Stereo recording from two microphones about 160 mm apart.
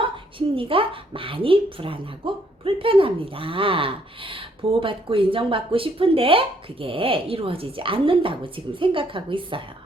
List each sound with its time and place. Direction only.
0.0 s speech: 35° right (ahead or behind)